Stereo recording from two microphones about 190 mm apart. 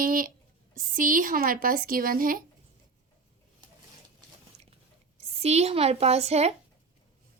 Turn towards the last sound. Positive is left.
turn(degrees=-35)  # may be behind; listen again after turning